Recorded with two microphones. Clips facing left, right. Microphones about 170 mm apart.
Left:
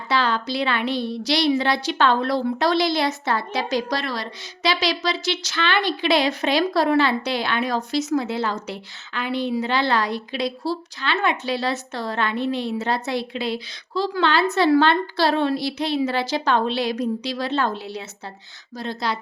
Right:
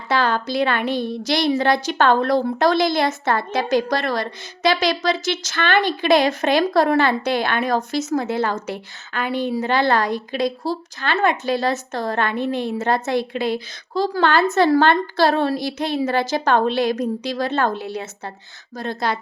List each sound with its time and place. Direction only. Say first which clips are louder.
0.1 s a woman's voice: right 2 dB; 50° right (ahead or behind)